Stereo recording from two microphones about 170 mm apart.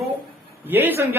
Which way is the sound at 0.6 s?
10° right (ahead or behind).